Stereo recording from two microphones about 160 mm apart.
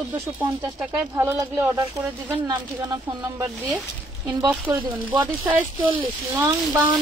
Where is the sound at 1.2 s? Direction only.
20° right (ahead or behind).